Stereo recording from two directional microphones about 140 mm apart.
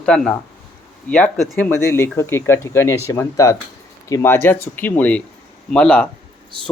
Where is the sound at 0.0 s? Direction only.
5° left (ahead or behind).